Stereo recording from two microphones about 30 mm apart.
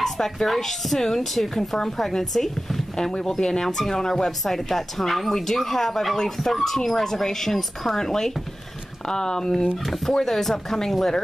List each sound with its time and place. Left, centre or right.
0.0 s a sound: centre
0.5 s speech: centre
3.1 s speech: left
3.7 s speech: centre
4.0 s speech: left
4.5 s speech: centre
9.8 s speech: centre